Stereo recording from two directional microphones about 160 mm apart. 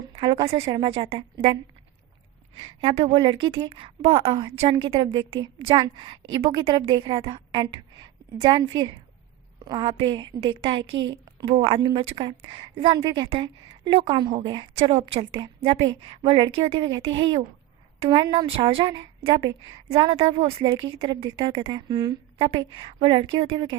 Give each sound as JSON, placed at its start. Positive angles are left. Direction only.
{"t": 0.1, "sound": "a woman's voice", "side_deg": -30}
{"t": 2.6, "sound": "a woman's voice", "side_deg": -30}